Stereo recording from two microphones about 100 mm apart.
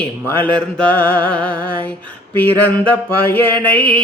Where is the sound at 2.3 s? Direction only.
20° left (ahead or behind).